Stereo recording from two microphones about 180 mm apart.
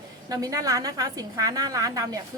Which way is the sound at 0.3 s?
20° right (ahead or behind).